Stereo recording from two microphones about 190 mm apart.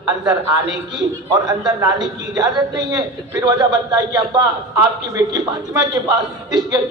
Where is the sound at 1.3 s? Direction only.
20° right (ahead or behind).